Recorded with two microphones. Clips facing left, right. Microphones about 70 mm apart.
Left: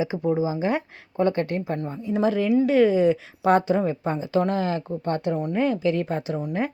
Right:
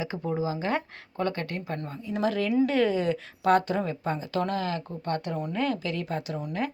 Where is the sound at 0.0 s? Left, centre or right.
Centre.